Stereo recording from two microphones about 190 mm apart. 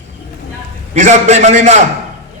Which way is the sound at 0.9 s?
40° right (ahead or behind).